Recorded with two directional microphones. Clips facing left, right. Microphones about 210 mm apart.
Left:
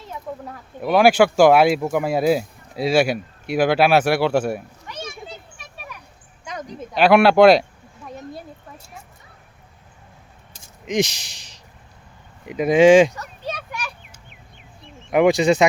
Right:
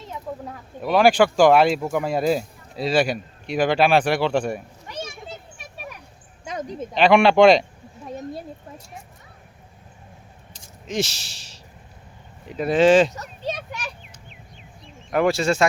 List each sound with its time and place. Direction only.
0.8 s speech: 10° left (ahead or behind)
6.4 s a sound: 25° right (ahead or behind)
6.9 s speech: 5° left (ahead or behind)
10.8 s speech: 15° left (ahead or behind)
13.1 s children playing: 20° right (ahead or behind)
15.1 s speech: 15° left (ahead or behind)